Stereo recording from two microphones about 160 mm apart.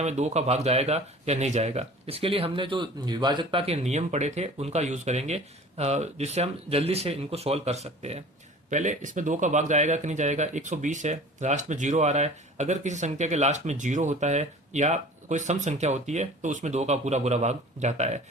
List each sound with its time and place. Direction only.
0.0 s speech: 45° right (ahead or behind)